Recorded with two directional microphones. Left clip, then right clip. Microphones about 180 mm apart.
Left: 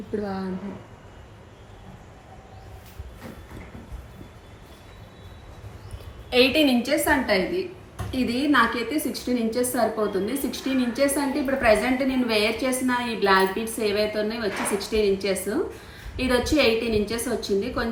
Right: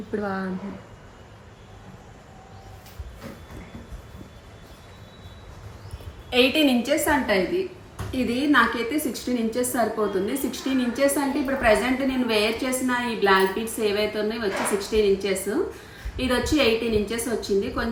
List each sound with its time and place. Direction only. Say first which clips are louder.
0.2 s speech: right 4 dB; 25° right (ahead or behind)
6.3 s a woman's voice: left 1 dB; centre (ahead or behind)